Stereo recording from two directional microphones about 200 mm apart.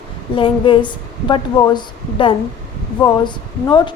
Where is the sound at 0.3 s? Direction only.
25° left (ahead or behind).